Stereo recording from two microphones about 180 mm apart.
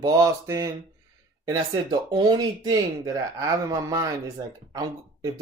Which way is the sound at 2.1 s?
20° right (ahead or behind).